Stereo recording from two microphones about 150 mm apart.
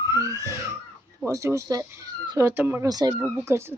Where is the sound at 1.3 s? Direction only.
20° right (ahead or behind).